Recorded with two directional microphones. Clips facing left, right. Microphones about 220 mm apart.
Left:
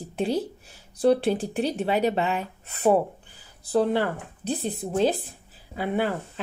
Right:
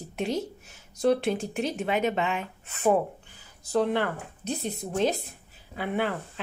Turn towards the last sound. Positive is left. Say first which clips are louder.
# left 3 dB
turn(degrees=40)  # may be behind; listen again after turning